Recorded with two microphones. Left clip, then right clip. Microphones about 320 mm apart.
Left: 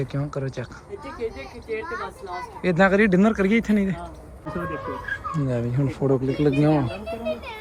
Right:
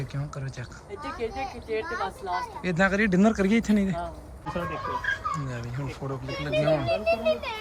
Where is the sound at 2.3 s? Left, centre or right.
Centre.